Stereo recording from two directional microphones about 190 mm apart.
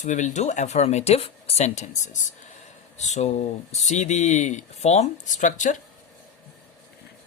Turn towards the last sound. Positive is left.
turn(degrees=40)  # may be behind; listen again after turning